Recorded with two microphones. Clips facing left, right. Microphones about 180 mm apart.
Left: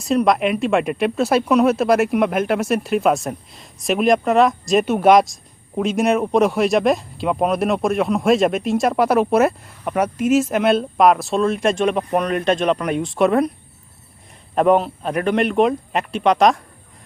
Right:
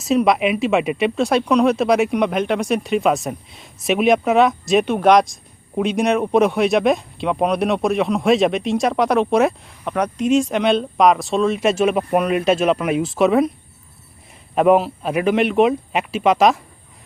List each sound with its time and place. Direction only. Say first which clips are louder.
0.0 s speech: right 1 dB; centre (ahead or behind)
14.5 s speech: right 1 dB; 5° right (ahead or behind)